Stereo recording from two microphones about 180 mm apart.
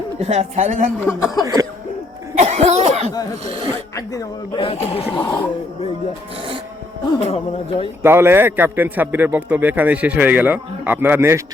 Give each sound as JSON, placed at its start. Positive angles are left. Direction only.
{"t": 0.2, "sound": "a woman's voice", "side_deg": -40}
{"t": 0.9, "sound": "speech", "side_deg": 15}
{"t": 2.4, "sound": "cough", "side_deg": -40}
{"t": 3.4, "sound": "a woman's voice", "side_deg": -30}
{"t": 3.9, "sound": "speech", "side_deg": 20}
{"t": 7.3, "sound": "speech", "side_deg": 35}
{"t": 8.0, "sound": "a man's voice", "side_deg": -15}